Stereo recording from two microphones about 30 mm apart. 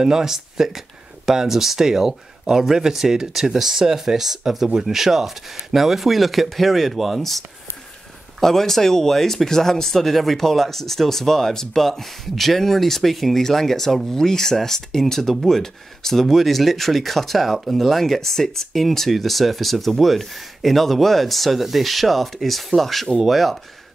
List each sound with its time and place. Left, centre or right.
0.0 s speech: centre